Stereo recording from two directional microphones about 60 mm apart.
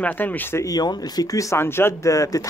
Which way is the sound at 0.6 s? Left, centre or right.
Left.